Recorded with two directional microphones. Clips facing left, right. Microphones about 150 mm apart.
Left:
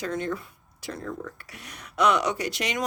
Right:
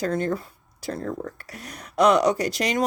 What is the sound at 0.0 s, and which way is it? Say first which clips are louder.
Speech: right 5 dB; 40° right (ahead or behind).